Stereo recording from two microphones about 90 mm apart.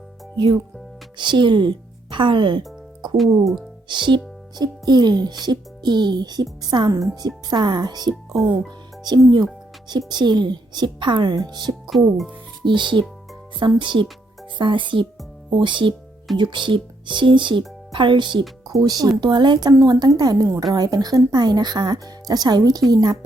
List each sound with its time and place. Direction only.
1.2 s speech: 60° right (ahead or behind)
3.2 s speech: centre (ahead or behind)
3.8 s a woman's voice: 60° right (ahead or behind)
11.9 s speech: centre (ahead or behind)
12.6 s a woman's voice: 60° right (ahead or behind)
18.7 s a child's voice: 45° right (ahead or behind)